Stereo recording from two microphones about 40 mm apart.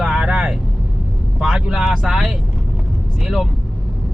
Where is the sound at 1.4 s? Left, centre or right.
Centre.